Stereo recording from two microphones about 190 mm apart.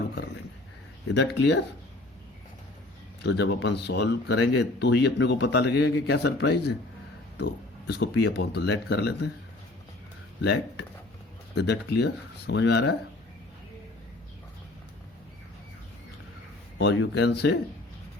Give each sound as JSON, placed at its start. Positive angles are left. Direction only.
{"t": 1.1, "sound": "speech", "side_deg": 65}
{"t": 3.2, "sound": "speech", "side_deg": 65}
{"t": 10.4, "sound": "speech", "side_deg": 65}
{"t": 16.7, "sound": "speech", "side_deg": 80}